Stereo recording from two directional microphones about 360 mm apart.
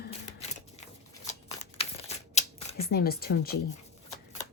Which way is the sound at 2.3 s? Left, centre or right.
Centre.